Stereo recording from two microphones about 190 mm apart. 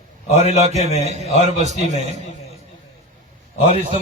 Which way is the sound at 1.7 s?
40° left (ahead or behind).